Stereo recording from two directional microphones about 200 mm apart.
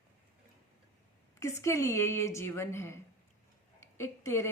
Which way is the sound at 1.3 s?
15° left (ahead or behind).